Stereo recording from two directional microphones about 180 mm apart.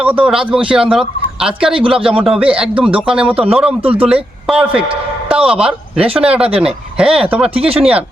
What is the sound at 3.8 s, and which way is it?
Speech, 30° right (ahead or behind).